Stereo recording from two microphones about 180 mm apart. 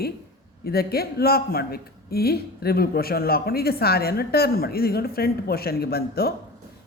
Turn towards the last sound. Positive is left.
turn(degrees=60)  # may be behind; listen again after turning